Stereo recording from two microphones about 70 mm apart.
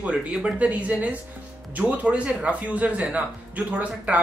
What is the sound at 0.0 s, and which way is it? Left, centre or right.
A man's voice, centre.